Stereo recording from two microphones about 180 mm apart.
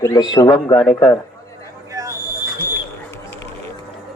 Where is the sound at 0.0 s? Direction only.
20° left (ahead or behind).